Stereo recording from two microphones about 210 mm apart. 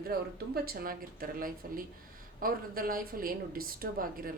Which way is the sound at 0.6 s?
45° right (ahead or behind).